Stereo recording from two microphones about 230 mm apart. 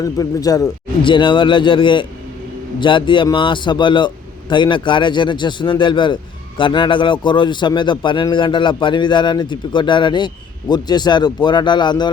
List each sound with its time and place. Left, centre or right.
0.0 s a man's voice: centre